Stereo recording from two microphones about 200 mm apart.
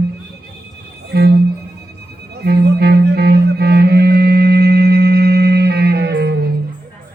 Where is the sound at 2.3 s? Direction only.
55° right (ahead or behind).